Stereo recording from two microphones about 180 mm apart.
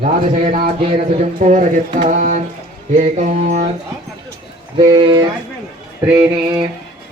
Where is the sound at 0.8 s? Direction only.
30° right (ahead or behind).